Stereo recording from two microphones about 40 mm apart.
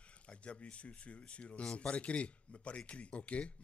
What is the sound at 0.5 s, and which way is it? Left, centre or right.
Speech, left.